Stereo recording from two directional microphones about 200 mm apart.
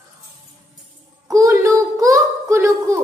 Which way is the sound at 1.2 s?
15° right (ahead or behind).